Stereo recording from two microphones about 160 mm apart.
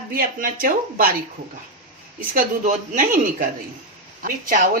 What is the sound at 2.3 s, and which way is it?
Speech, 60° right (ahead or behind).